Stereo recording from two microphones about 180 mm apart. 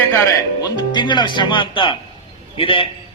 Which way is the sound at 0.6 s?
25° left (ahead or behind).